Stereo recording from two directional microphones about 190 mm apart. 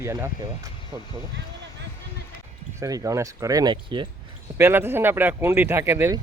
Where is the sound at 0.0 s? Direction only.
15° right (ahead or behind).